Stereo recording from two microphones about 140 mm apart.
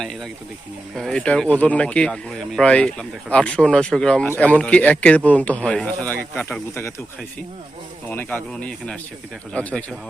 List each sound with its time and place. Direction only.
0.0 s speech: centre (ahead or behind)
8.1 s speech: 10° left (ahead or behind)